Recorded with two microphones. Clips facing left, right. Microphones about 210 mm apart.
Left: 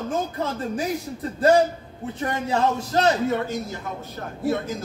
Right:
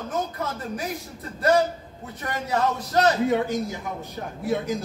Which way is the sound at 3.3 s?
15° right (ahead or behind).